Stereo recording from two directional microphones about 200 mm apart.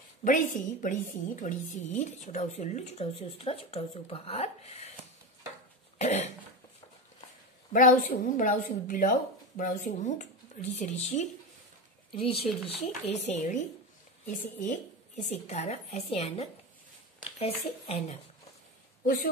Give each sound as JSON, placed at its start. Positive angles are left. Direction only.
{"t": 0.2, "sound": "a woman's voice", "side_deg": 40}
{"t": 5.9, "sound": "cough", "side_deg": 35}
{"t": 7.7, "sound": "a woman's voice", "side_deg": 45}